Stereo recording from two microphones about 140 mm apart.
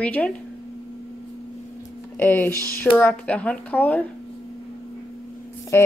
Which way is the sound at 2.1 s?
15° left (ahead or behind).